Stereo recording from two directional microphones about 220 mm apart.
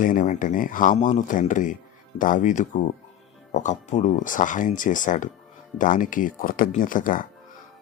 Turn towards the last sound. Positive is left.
turn(degrees=40)  # may be behind; listen again after turning